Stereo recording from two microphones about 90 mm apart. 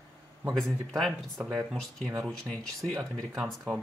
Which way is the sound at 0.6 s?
5° left (ahead or behind).